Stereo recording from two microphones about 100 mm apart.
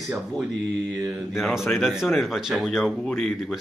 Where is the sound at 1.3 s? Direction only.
Centre (ahead or behind).